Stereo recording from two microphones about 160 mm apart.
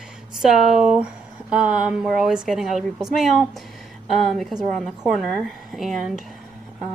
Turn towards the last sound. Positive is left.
turn(degrees=0)  # may be behind; listen again after turning